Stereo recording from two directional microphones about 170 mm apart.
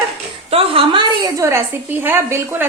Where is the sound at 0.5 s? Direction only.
35° right (ahead or behind).